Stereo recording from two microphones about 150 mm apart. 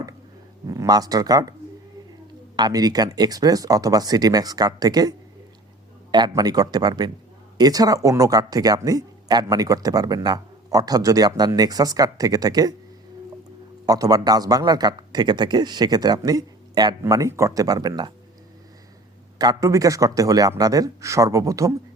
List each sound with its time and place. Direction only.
0.7 s speech: 25° right (ahead or behind)
2.6 s speech: 25° right (ahead or behind)
13.8 s speech: 25° right (ahead or behind)
19.4 s speech: 25° right (ahead or behind)